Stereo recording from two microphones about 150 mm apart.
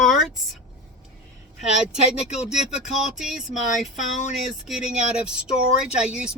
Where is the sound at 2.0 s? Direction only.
45° left (ahead or behind).